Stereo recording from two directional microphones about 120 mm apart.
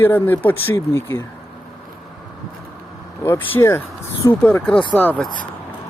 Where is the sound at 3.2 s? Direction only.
20° left (ahead or behind).